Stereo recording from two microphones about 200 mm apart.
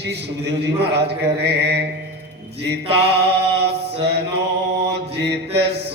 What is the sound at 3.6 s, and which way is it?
Mantra, 55° right (ahead or behind).